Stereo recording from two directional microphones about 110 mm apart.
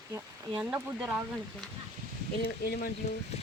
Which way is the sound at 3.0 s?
90° left.